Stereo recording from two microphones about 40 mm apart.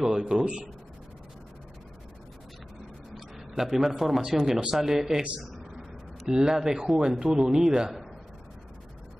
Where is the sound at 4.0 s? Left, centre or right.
Centre.